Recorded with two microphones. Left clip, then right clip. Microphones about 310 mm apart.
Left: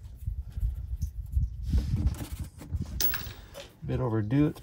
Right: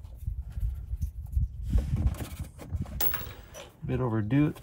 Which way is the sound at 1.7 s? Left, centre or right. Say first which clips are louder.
Even; centre.